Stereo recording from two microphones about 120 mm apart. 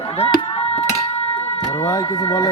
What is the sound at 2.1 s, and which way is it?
Speech, 45° left (ahead or behind).